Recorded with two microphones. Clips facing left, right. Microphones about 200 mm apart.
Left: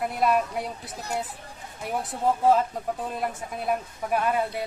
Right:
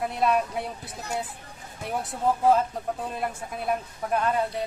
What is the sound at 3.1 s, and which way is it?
Speech, 5° left (ahead or behind).